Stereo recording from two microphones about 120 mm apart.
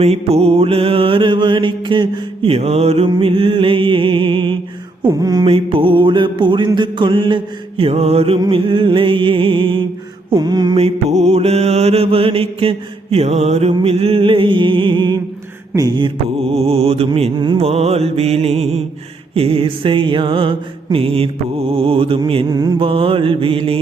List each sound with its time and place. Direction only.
0.0 s mantra: 60° right (ahead or behind)
3.1 s mantra: 50° right (ahead or behind); by 5.5 s 35° right (ahead or behind)
5.5 s mantra: 50° right (ahead or behind)
8.4 s mantra: 45° right (ahead or behind)
10.8 s mantra: 60° right (ahead or behind); by 16.1 s 40° right (ahead or behind)
16.6 s mantra: 60° right (ahead or behind)
17.3 s mantra: 40° right (ahead or behind)
17.6 s mantra: 55° right (ahead or behind)
22.4 s mantra: 30° right (ahead or behind)
22.8 s mantra: 50° right (ahead or behind)